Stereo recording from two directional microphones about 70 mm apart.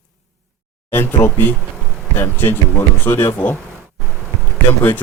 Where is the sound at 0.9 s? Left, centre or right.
Left.